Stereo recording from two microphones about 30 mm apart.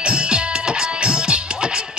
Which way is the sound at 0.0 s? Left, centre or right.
Right.